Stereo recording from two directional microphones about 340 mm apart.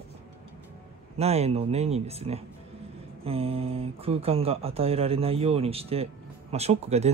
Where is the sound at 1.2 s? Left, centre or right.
Centre.